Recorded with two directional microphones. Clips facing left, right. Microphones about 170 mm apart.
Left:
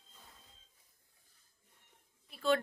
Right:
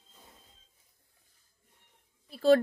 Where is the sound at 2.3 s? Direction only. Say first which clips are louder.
Right 9 dB; 35° right (ahead or behind).